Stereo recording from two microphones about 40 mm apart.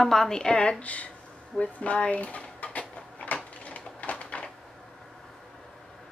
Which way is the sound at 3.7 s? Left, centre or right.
Left.